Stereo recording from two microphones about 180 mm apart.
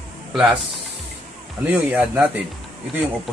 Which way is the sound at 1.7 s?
10° right (ahead or behind).